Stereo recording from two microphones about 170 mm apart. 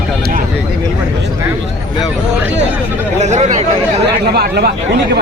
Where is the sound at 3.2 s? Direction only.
40° right (ahead or behind).